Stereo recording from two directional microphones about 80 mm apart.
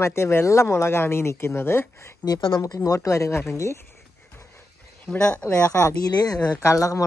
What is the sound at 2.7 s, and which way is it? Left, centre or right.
Speech, left.